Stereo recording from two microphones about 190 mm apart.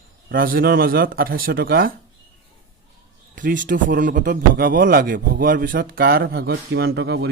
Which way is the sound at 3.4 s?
45° right (ahead or behind).